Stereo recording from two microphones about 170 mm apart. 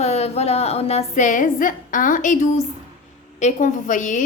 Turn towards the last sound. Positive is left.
turn(degrees=50)  # may be behind; listen again after turning